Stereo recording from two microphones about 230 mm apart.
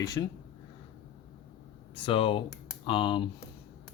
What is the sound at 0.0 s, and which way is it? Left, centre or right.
Speech, centre.